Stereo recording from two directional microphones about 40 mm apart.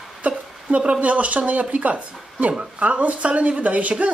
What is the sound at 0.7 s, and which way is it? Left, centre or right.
Speech, right.